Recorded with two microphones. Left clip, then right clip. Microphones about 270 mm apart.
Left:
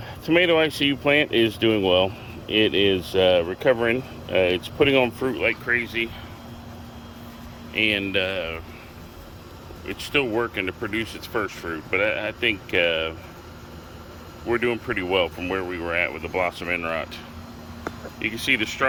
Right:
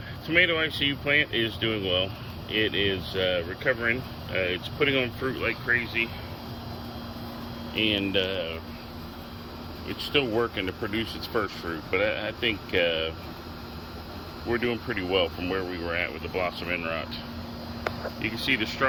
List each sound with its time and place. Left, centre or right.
0.3 s speech: left
7.7 s speech: centre
9.9 s speech: centre
14.4 s speech: centre
18.2 s speech: centre